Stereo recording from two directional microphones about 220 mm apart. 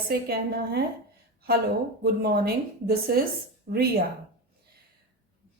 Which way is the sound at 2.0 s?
45° right (ahead or behind).